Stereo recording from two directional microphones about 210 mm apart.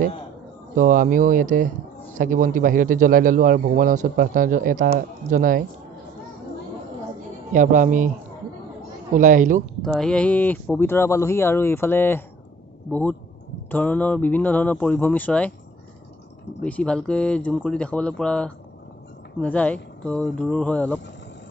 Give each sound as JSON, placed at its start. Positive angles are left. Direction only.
{"t": 0.7, "sound": "a man's voice", "side_deg": -40}
{"t": 7.5, "sound": "a man's voice", "side_deg": -40}
{"t": 9.1, "sound": "a man's voice", "side_deg": -35}
{"t": 9.8, "sound": "speech", "side_deg": 0}
{"t": 13.7, "sound": "speech", "side_deg": 10}
{"t": 16.6, "sound": "speech", "side_deg": 5}